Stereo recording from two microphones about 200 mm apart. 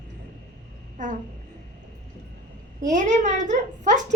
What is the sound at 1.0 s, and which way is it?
Speech, 40° right (ahead or behind).